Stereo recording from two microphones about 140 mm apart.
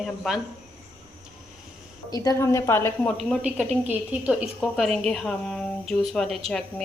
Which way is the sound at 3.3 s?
5° right (ahead or behind).